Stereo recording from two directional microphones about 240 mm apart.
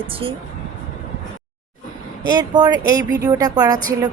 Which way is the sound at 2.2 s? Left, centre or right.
Centre.